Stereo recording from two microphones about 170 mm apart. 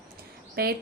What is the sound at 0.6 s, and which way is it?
Speech, 65° right (ahead or behind).